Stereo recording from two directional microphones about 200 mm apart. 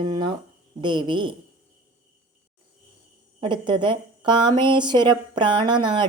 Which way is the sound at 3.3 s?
25° right (ahead or behind).